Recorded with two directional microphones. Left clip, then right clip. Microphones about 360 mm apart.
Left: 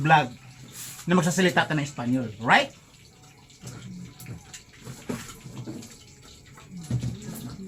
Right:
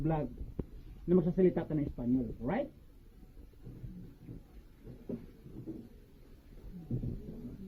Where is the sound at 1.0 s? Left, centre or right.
Centre.